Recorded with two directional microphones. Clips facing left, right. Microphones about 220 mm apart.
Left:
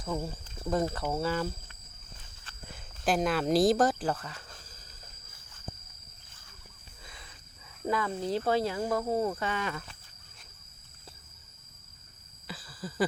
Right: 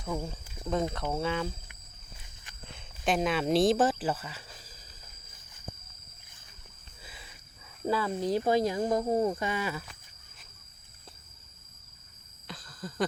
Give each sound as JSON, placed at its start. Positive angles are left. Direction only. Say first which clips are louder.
{"t": 0.0, "sound": "speech", "louder": "left 1 dB", "side_deg": 0}
{"t": 2.6, "sound": "speech", "louder": "even", "side_deg": 0}
{"t": 8.0, "sound": "speech", "louder": "right 2 dB", "side_deg": -15}
{"t": 12.5, "sound": "a sound", "louder": "left 1 dB", "side_deg": 5}